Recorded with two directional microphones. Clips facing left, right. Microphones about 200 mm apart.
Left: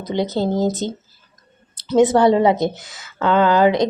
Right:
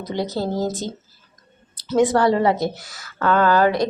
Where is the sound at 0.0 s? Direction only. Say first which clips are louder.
Left 4 dB; 20° left (ahead or behind).